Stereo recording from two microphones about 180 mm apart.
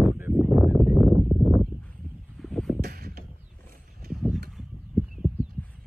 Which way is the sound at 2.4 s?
Centre (ahead or behind).